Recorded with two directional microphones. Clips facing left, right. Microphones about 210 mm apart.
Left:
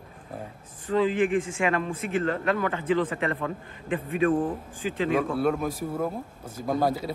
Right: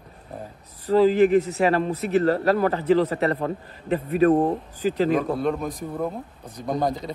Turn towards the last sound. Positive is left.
turn(degrees=5)  # may be behind; listen again after turning